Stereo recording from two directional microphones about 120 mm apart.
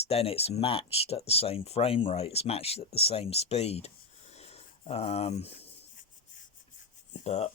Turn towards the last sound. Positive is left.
turn(degrees=65)  # may be behind; listen again after turning